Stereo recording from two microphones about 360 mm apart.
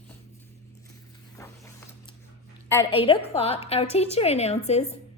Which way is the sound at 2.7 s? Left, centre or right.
Centre.